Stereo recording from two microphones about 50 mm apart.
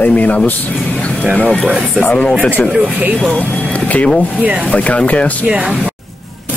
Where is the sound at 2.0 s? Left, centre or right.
Left.